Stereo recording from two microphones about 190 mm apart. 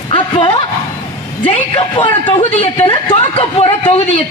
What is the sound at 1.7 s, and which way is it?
A woman's voice, 30° left (ahead or behind).